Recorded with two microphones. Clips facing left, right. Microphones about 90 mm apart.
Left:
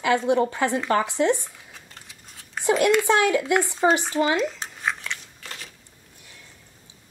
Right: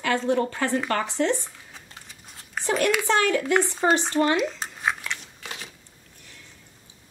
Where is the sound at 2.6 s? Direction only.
10° left (ahead or behind).